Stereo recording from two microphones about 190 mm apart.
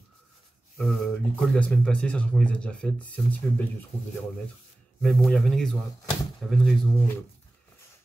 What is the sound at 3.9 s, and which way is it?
Speech, 30° left (ahead or behind).